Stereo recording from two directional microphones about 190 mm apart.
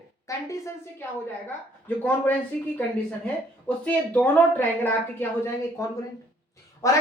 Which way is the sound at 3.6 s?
5° left (ahead or behind).